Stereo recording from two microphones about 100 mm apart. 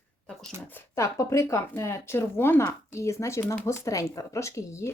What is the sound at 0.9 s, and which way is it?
Speech, 30° left (ahead or behind).